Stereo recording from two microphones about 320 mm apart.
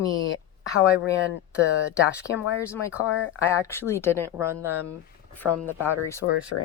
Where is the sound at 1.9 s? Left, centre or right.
Centre.